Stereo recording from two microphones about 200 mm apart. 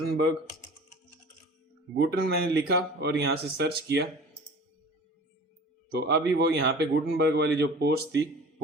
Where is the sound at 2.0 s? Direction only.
50° right (ahead or behind).